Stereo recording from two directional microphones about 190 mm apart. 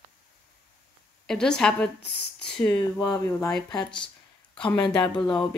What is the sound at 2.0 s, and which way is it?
Speech, 60° left (ahead or behind).